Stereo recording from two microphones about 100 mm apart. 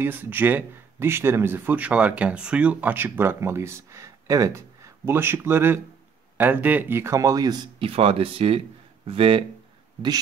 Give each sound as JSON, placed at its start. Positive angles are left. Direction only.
{"t": 0.0, "sound": "speech", "side_deg": -20}
{"t": 7.8, "sound": "speech", "side_deg": -70}